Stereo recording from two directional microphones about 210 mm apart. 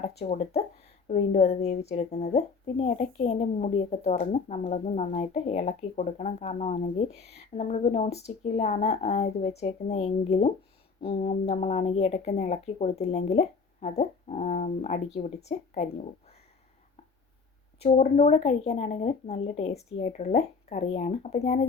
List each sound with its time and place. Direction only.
0.2 s speech: 35° left (ahead or behind)
17.7 s speech: 30° left (ahead or behind)